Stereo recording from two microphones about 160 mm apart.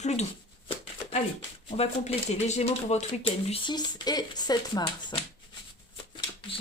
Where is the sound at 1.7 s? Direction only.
40° left (ahead or behind).